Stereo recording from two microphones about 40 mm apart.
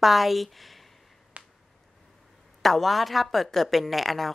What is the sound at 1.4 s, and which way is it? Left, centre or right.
Finger snapping, right.